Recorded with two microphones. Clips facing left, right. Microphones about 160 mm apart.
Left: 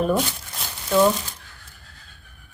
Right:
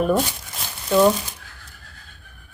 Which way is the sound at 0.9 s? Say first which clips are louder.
Right 2 dB; 5° right (ahead or behind).